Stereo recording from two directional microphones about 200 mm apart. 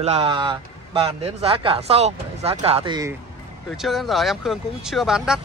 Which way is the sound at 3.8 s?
Centre (ahead or behind).